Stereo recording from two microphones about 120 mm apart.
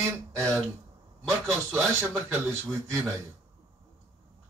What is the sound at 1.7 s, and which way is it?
Speech, 25° right (ahead or behind).